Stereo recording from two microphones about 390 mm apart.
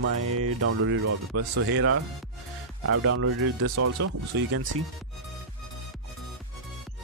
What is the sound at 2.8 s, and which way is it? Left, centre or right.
Speech, right.